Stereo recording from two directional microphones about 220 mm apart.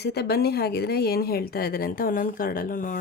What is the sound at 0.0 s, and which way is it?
A woman's voice, 45° left (ahead or behind).